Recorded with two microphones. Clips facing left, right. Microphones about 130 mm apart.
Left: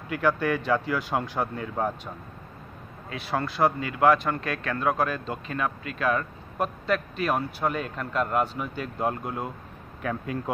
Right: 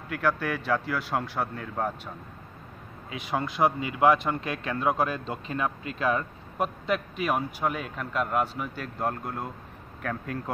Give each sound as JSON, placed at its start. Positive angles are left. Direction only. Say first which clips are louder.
{"t": 0.1, "sound": "speech", "louder": "left 3 dB", "side_deg": 0}
{"t": 3.1, "sound": "speech", "louder": "left 1 dB", "side_deg": -15}